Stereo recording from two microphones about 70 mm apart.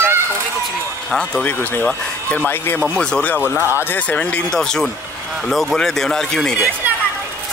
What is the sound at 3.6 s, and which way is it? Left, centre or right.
Speech, right.